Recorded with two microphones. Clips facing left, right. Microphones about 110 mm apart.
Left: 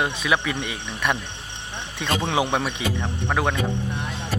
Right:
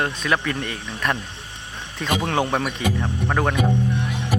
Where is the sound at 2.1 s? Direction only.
5° right (ahead or behind).